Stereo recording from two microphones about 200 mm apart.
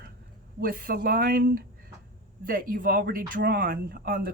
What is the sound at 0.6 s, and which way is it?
Speech, 45° right (ahead or behind).